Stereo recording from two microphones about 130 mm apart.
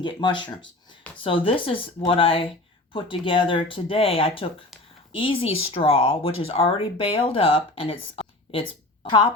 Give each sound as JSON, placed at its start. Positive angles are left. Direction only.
{"t": 0.0, "sound": "speech", "side_deg": 35}